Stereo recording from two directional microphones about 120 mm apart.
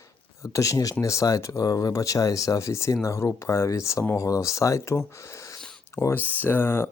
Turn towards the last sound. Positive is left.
turn(degrees=20)  # may be behind; listen again after turning